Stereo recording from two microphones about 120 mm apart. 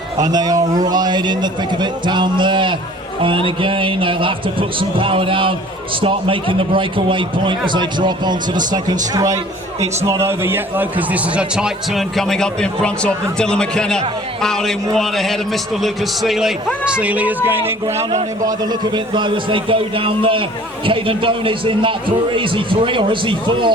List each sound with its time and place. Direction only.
0.2 s a man's voice: 35° right (ahead or behind)
18.4 s a man's voice: 35° right (ahead or behind)